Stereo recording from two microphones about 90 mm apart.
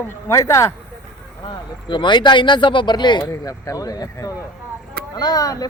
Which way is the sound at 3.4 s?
40° left (ahead or behind).